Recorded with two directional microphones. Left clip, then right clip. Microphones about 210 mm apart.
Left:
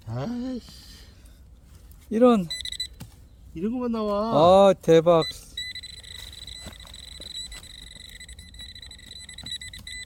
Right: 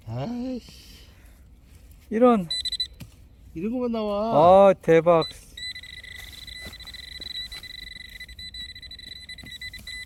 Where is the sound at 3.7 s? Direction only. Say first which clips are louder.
Even; 30° left (ahead or behind).